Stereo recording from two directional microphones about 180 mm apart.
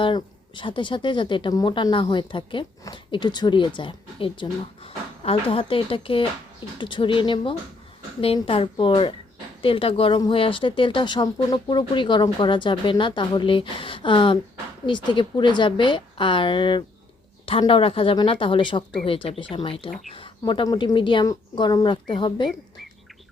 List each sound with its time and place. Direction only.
0.0 s a woman's voice: 25° left (ahead or behind)